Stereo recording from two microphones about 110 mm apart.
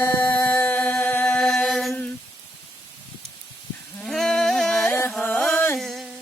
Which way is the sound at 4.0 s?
5° left (ahead or behind).